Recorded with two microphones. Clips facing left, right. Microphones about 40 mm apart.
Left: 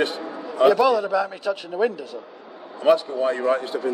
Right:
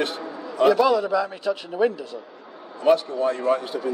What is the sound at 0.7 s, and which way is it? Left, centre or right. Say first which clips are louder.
A man's voice: left 1 dB; centre.